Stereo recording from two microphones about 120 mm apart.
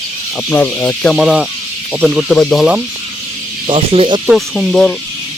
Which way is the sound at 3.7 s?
50° right (ahead or behind).